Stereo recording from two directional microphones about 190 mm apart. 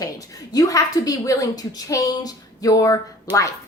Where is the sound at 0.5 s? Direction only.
20° left (ahead or behind).